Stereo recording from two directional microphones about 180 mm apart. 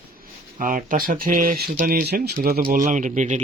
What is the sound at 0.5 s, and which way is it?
Speech, 45° right (ahead or behind).